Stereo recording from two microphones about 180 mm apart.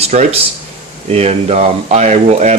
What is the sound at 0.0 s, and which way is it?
Speech, 35° right (ahead or behind).